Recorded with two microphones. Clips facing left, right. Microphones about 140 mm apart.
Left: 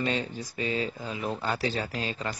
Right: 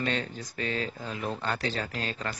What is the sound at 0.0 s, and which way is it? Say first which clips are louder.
Speech: left 2 dB; 10° left (ahead or behind).